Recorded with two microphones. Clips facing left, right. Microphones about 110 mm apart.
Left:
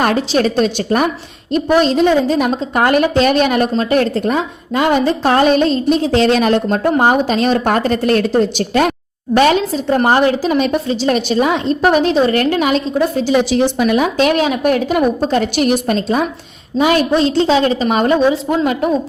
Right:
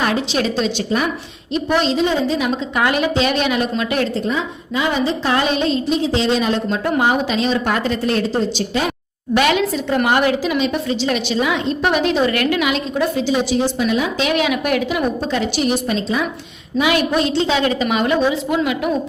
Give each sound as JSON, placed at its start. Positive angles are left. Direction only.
{"t": 0.0, "sound": "a woman's voice", "side_deg": 45}
{"t": 6.8, "sound": "a woman's voice", "side_deg": 45}
{"t": 9.3, "sound": "a woman's voice", "side_deg": 35}
{"t": 13.3, "sound": "a woman's voice", "side_deg": 80}
{"t": 16.7, "sound": "a woman's voice", "side_deg": 35}